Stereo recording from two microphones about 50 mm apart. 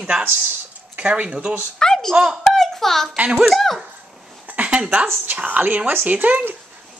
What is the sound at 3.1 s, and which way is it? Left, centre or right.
Speech, right.